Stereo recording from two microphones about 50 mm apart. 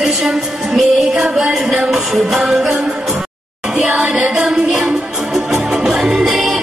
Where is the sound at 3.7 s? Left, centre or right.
Right.